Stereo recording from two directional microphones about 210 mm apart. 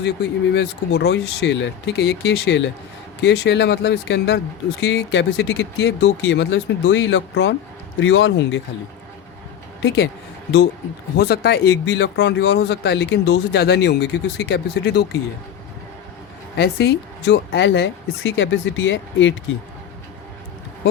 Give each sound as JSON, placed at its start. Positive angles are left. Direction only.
{"t": 0.5, "sound": "speech", "side_deg": 50}
{"t": 9.8, "sound": "speech", "side_deg": 55}
{"t": 11.2, "sound": "speech", "side_deg": 50}
{"t": 16.6, "sound": "speech", "side_deg": 50}